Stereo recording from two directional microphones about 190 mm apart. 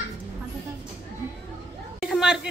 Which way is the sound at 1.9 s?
Centre (ahead or behind).